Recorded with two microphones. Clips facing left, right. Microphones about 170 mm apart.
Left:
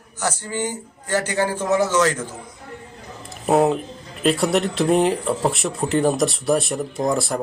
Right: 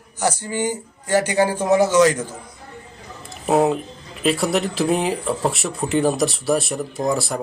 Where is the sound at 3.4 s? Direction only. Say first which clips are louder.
Even; centre (ahead or behind).